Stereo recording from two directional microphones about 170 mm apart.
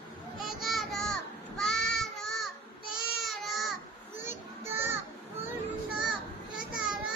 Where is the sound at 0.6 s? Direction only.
Centre (ahead or behind).